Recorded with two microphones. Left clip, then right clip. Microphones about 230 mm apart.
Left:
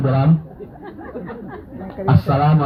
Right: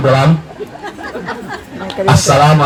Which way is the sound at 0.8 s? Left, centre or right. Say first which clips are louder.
Right 8 dB; right.